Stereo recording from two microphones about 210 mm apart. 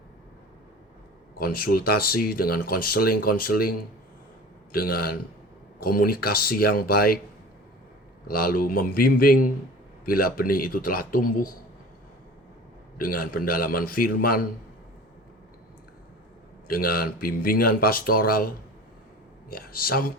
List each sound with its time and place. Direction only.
1.4 s speech: 45° left (ahead or behind)
8.3 s speech: 45° left (ahead or behind)
13.0 s speech: 45° left (ahead or behind)
16.6 s speech: 45° left (ahead or behind)
19.5 s speech: 45° left (ahead or behind)